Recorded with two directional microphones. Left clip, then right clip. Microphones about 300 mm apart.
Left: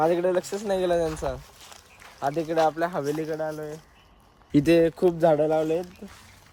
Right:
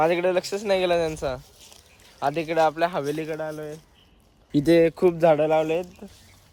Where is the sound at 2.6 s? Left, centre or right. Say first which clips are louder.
Right 1 dB; centre.